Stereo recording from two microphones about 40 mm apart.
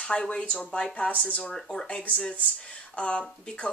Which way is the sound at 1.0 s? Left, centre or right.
Left.